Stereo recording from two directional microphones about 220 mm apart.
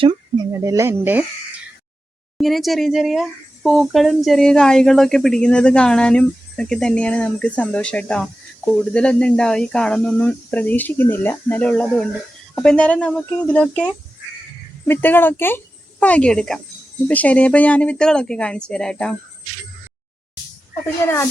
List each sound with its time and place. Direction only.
0.0 s a sound: 25° right (ahead or behind)
0.5 s speech: 15° right (ahead or behind)
2.4 s a woman's voice: centre (ahead or behind)
20.8 s a child's voice: 10° left (ahead or behind)